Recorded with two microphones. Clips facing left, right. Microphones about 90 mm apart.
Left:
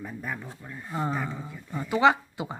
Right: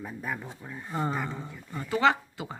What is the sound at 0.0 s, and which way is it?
Speech, 5° right (ahead or behind).